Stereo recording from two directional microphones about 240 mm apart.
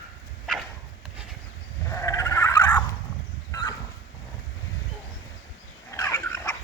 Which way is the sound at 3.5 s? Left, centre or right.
Centre.